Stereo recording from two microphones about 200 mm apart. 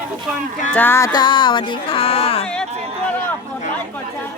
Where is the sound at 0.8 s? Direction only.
10° left (ahead or behind); by 2.5 s 30° left (ahead or behind).